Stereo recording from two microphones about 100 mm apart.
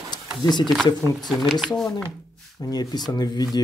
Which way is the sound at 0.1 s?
45° left (ahead or behind).